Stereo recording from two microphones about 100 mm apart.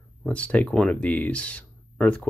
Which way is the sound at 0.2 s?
10° left (ahead or behind).